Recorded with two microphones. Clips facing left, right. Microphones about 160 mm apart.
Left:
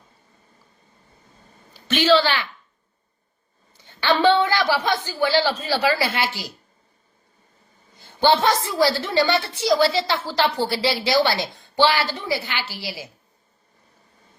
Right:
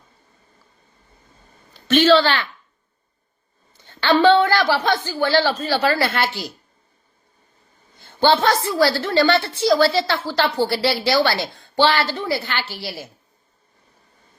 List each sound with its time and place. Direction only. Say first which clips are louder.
2.0 s a woman's voice: right 3 dB; 15° left (ahead or behind)
4.0 s a woman's voice: right 3 dB; 15° left (ahead or behind)
8.2 s a woman's voice: right 1 dB; 15° left (ahead or behind)